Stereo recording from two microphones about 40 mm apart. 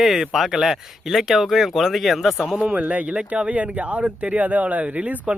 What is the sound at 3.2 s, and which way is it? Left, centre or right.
Speech, right.